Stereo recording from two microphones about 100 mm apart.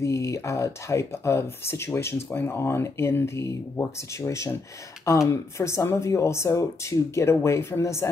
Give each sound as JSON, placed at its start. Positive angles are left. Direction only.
{"t": 0.0, "sound": "speech", "side_deg": 30}